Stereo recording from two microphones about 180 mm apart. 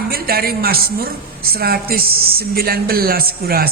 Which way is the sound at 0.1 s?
55° right (ahead or behind).